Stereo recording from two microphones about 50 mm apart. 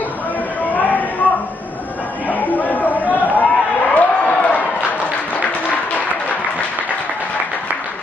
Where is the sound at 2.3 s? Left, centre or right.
Left.